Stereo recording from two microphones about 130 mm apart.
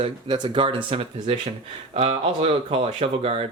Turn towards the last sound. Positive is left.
turn(degrees=-50)  # may be behind; listen again after turning